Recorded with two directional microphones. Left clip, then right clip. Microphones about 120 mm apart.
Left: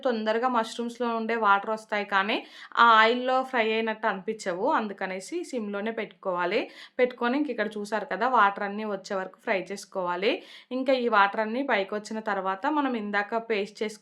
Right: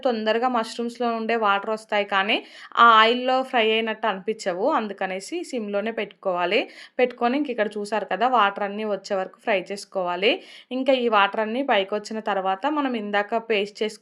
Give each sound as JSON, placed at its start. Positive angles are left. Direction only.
{"t": 0.0, "sound": "a woman's voice", "side_deg": -25}